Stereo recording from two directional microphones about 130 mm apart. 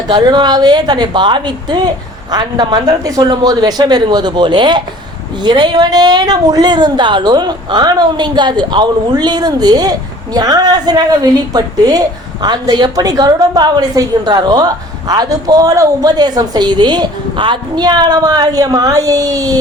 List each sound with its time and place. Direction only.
0.1 s a woman's voice: 35° right (ahead or behind)